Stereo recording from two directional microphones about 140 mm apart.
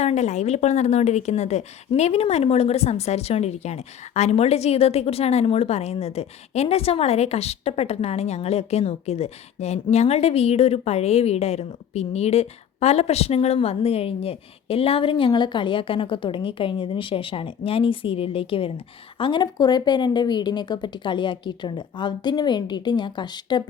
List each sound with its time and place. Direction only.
0.0 s speech: 55° left (ahead or behind); by 23.6 s 30° left (ahead or behind)